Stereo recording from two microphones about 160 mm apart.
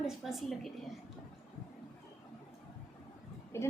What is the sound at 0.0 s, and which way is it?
Speech, centre (ahead or behind).